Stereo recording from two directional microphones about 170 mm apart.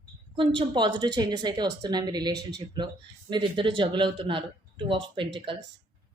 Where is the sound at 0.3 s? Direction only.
30° right (ahead or behind).